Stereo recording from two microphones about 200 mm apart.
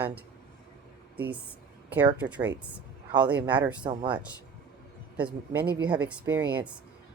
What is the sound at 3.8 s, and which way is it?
Speech, 20° right (ahead or behind).